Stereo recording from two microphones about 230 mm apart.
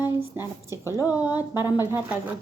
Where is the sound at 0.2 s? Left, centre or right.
Centre.